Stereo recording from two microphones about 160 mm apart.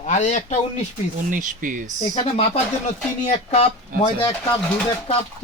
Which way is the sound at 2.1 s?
40° left (ahead or behind).